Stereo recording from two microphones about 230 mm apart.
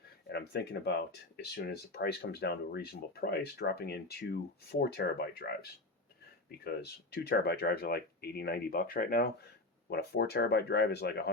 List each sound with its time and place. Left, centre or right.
0.3 s speech: left
6.7 s speech: left